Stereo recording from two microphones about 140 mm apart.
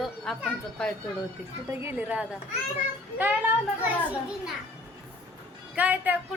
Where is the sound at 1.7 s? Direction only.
15° right (ahead or behind).